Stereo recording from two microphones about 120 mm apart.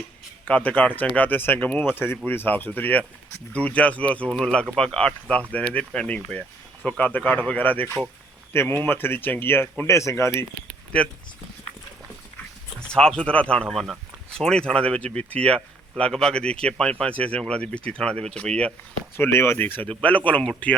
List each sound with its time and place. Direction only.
0.4 s speech: 10° left (ahead or behind)
12.9 s speech: 5° left (ahead or behind)
19.1 s speech: 20° left (ahead or behind)